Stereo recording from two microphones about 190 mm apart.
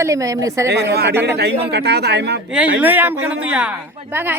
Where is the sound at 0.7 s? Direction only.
60° right (ahead or behind).